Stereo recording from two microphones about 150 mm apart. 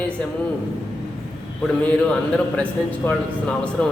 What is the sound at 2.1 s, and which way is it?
A man's voice, 10° left (ahead or behind).